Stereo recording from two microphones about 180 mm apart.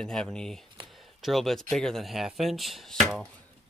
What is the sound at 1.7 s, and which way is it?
Speech, 5° left (ahead or behind).